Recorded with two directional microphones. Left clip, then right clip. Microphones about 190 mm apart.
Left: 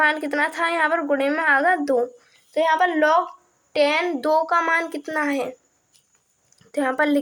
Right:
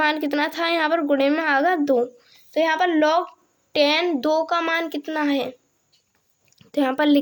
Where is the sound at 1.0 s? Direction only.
40° right (ahead or behind).